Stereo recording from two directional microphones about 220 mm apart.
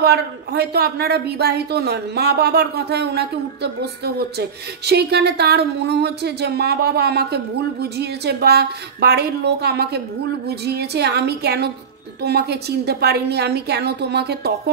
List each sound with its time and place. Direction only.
0.0 s speech: 45° right (ahead or behind)